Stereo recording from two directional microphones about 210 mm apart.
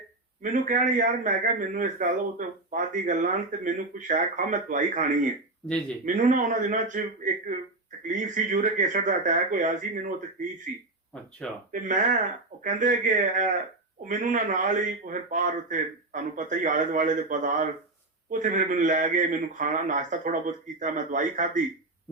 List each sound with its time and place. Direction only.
0.4 s a man's voice: 40° right (ahead or behind)
8.0 s a man's voice: 40° right (ahead or behind)